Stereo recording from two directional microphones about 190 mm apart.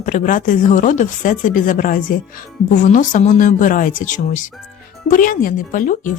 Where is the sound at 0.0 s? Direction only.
40° left (ahead or behind).